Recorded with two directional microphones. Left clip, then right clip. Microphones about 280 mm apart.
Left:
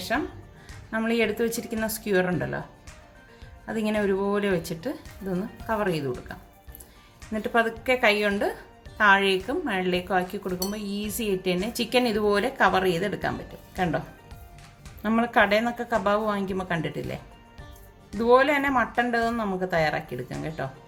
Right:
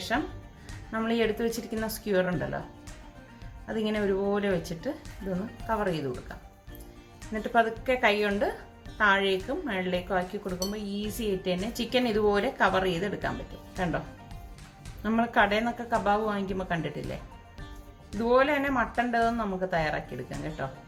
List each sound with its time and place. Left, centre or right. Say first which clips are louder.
0.9 s speech: left 3 dB; left
3.7 s speech: left 3 dB; left
7.3 s speech: left 1 dB; left
15.0 s speech: left 3 dB; left
18.2 s speech: left 4 dB; left